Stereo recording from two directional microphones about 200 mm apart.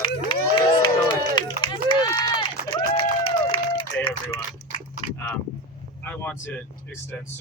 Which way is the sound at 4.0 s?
10° left (ahead or behind).